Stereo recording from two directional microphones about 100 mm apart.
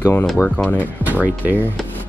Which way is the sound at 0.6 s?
20° left (ahead or behind).